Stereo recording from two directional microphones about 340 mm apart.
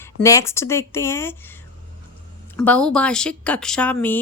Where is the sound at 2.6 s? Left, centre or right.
Centre.